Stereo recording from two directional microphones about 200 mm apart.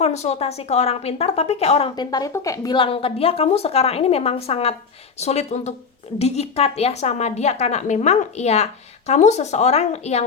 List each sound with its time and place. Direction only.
0.0 s a woman's voice: 35° left (ahead or behind)
2.0 s a woman's voice: 15° left (ahead or behind); by 10.2 s 35° left (ahead or behind)